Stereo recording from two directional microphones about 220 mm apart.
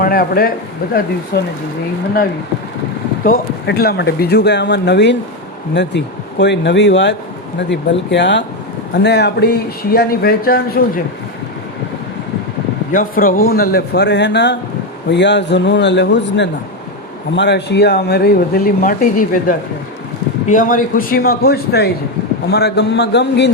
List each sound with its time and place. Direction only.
0.0 s speech: 40° left (ahead or behind)
3.2 s speech: 45° left (ahead or behind)
12.9 s speech: 40° left (ahead or behind)